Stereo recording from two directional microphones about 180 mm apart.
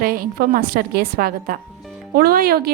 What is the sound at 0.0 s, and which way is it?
A woman's voice, 50° right (ahead or behind).